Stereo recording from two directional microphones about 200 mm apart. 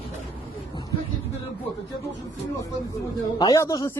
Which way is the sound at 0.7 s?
20° left (ahead or behind).